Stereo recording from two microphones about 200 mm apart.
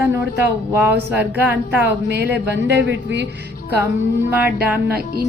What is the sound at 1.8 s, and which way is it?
Speech, 55° right (ahead or behind).